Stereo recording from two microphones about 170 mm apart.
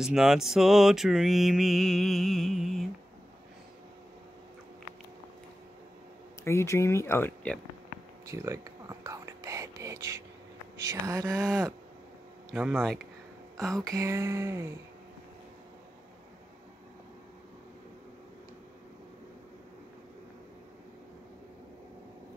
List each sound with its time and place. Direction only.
0.0 s mantra: 5° right (ahead or behind)
6.4 s speech: 15° left (ahead or behind)
8.3 s whispering: 20° right (ahead or behind)
10.8 s speech: 20° right (ahead or behind)
13.6 s mantra: centre (ahead or behind)
13.9 s speech: 15° right (ahead or behind)